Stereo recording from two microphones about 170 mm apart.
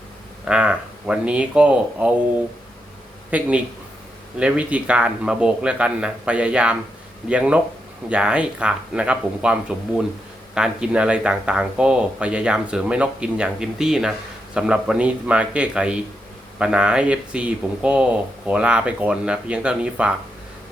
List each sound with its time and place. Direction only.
0.4 s speech: 5° right (ahead or behind)
3.2 s speech: 10° right (ahead or behind)